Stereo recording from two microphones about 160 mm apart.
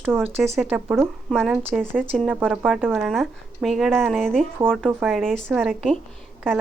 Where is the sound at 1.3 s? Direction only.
Centre (ahead or behind).